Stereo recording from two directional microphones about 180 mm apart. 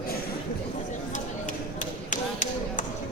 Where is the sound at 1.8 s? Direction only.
45° left (ahead or behind).